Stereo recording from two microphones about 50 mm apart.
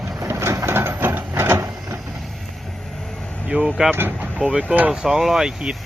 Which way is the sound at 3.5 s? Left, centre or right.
Centre.